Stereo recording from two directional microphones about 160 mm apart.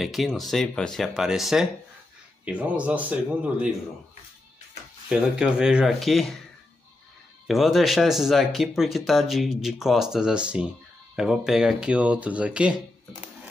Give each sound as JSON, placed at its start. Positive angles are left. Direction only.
{"t": 0.0, "sound": "speech", "side_deg": 0}
{"t": 5.1, "sound": "speech", "side_deg": -5}
{"t": 7.4, "sound": "speech", "side_deg": 0}